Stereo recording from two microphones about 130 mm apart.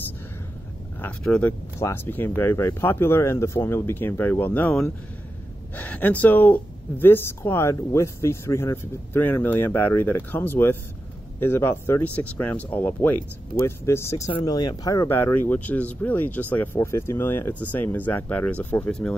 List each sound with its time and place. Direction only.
1.0 s speech: 10° left (ahead or behind)